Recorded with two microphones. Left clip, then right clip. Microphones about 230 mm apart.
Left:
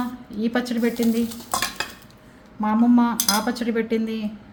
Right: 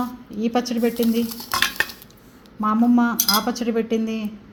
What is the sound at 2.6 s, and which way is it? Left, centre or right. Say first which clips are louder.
Speech: right 1 dB; centre.